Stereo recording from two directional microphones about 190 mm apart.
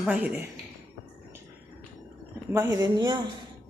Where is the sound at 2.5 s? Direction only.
15° right (ahead or behind).